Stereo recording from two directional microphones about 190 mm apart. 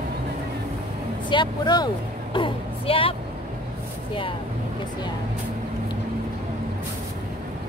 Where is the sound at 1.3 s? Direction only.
25° left (ahead or behind).